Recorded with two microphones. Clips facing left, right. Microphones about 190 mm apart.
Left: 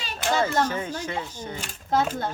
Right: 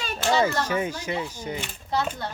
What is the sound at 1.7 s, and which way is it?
Speech, 45° left (ahead or behind).